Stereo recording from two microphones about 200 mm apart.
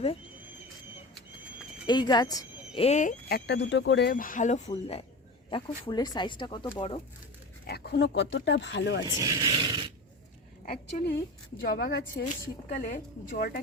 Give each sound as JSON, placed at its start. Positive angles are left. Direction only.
{"t": 1.9, "sound": "speech", "side_deg": 20}
{"t": 2.7, "sound": "speech", "side_deg": 35}
{"t": 7.7, "sound": "speech", "side_deg": 55}
{"t": 9.0, "sound": "a sound", "side_deg": -15}
{"t": 10.7, "sound": "speech", "side_deg": 50}
{"t": 12.7, "sound": "a woman's voice", "side_deg": 40}